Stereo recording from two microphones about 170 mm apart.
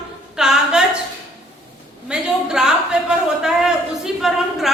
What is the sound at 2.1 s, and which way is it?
A man's voice, 5° right (ahead or behind).